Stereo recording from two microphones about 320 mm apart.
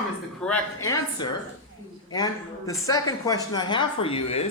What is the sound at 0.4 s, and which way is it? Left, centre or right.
A man's voice, centre.